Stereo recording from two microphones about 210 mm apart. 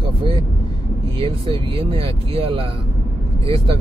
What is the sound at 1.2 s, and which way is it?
Speech, 25° right (ahead or behind).